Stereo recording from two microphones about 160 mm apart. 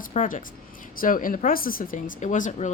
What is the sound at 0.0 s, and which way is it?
A woman's voice, 55° left (ahead or behind).